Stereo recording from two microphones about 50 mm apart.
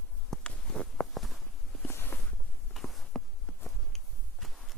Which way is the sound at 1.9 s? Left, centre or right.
Left.